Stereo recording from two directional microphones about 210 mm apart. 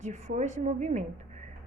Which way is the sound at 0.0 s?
35° right (ahead or behind).